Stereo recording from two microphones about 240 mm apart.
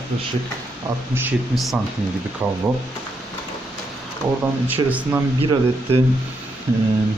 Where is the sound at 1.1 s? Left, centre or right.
Centre.